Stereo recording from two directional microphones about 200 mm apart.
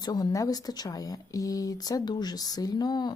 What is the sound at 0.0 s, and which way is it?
Speech, 20° left (ahead or behind).